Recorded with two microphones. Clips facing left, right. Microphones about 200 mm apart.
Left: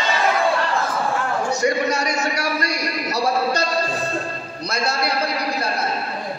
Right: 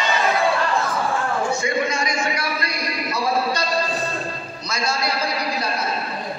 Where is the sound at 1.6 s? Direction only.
40° left (ahead or behind).